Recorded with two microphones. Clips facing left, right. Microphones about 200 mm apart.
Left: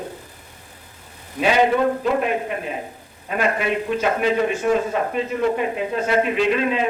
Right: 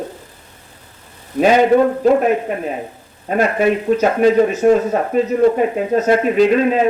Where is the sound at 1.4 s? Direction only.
40° right (ahead or behind).